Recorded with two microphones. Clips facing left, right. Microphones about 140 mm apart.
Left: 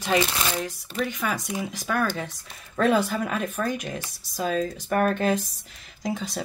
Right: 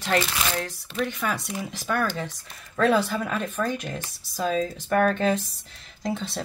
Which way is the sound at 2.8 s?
20° left (ahead or behind).